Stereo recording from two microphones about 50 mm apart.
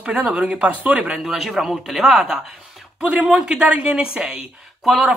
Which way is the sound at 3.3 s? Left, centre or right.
Centre.